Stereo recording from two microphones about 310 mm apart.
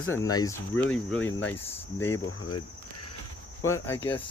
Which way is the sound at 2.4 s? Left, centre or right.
Left.